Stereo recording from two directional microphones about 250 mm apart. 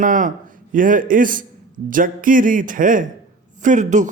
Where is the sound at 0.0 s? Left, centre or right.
Right.